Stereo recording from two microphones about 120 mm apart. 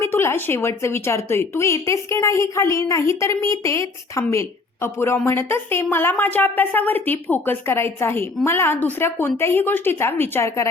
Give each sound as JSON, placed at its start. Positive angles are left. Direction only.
{"t": 0.0, "sound": "a woman's voice", "side_deg": 20}